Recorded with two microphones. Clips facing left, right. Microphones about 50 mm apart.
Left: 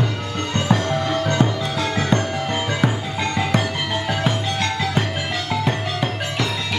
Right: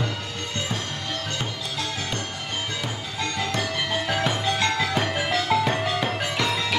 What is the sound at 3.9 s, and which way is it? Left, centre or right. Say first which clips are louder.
Music: left 2 dB; centre.